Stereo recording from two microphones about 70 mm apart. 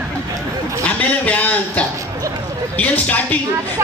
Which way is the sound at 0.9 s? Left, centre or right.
Left.